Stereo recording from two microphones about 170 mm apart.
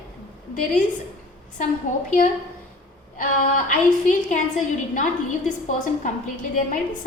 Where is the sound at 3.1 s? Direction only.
50° left (ahead or behind).